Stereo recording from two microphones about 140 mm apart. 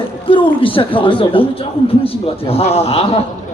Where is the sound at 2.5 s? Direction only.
45° left (ahead or behind).